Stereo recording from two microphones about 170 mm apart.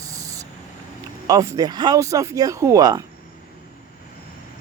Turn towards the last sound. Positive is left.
turn(degrees=-20)  # may be behind; listen again after turning